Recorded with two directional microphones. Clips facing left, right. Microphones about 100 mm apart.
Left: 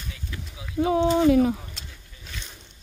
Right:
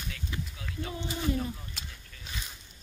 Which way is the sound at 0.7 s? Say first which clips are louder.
Left 17 dB; 90° left.